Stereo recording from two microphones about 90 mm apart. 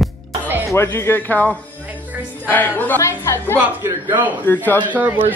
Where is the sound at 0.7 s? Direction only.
25° left (ahead or behind).